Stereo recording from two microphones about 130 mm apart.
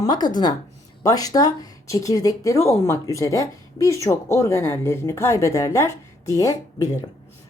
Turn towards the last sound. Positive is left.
turn(degrees=25)  # may be behind; listen again after turning